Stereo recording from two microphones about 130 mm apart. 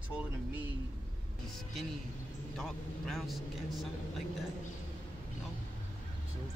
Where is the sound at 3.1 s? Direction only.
Centre (ahead or behind).